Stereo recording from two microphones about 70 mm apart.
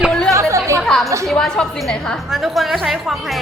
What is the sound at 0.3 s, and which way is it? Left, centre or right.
Chatter, right.